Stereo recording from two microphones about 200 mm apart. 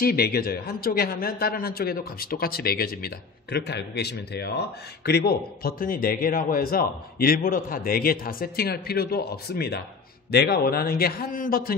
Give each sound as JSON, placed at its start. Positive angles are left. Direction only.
{"t": 0.0, "sound": "a man's voice", "side_deg": 50}